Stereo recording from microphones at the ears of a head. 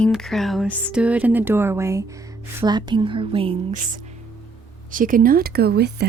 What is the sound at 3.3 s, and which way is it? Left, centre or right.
A woman's voice, right.